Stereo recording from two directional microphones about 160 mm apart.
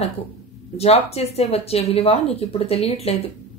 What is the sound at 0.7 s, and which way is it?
Speech, 40° left (ahead or behind).